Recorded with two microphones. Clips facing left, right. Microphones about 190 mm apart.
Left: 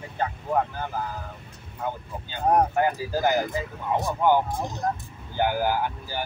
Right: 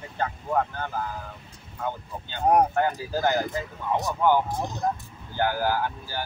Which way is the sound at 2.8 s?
10° left (ahead or behind).